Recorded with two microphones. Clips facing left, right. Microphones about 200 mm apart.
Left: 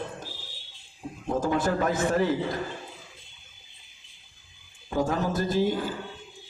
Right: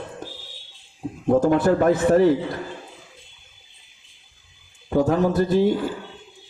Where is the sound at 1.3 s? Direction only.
60° right (ahead or behind).